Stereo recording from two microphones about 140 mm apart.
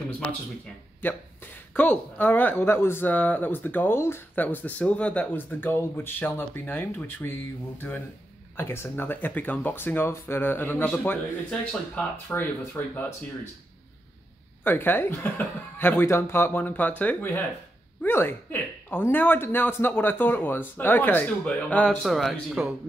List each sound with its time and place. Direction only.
1.0 s speech: 15° left (ahead or behind)
14.6 s speech: 15° left (ahead or behind)
22.0 s speech: centre (ahead or behind)